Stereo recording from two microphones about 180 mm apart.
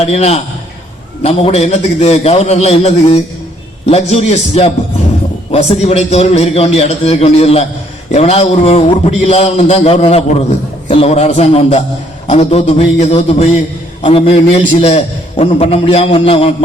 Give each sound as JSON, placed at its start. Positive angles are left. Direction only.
{"t": 0.0, "sound": "a man's voice", "side_deg": 35}